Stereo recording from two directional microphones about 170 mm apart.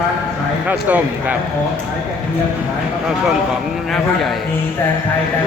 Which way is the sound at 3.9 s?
Centre (ahead or behind).